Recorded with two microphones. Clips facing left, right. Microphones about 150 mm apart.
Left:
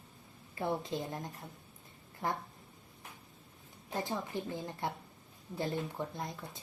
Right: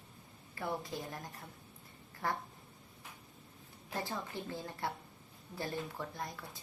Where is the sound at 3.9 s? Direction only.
20° left (ahead or behind).